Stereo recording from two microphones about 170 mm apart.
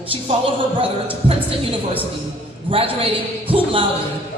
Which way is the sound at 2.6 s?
30° right (ahead or behind).